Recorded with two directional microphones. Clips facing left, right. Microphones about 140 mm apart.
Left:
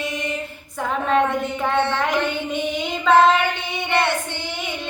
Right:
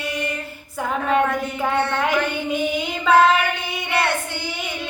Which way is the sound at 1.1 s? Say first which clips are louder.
Left 1 dB; 5° right (ahead or behind).